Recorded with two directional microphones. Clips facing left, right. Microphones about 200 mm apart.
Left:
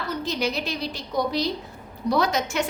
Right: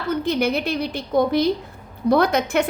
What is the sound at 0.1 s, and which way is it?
A woman's voice, 55° right (ahead or behind).